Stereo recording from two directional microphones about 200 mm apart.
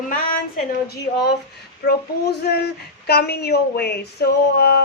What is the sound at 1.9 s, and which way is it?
Speech, 55° left (ahead or behind).